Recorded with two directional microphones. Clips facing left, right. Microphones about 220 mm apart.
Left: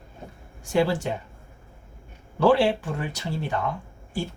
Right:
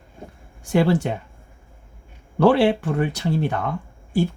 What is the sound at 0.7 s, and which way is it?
Speech, 55° right (ahead or behind).